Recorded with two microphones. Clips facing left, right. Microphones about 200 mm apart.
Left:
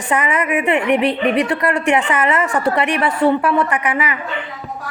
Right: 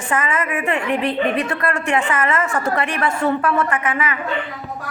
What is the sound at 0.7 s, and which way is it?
Speech, 65° left (ahead or behind).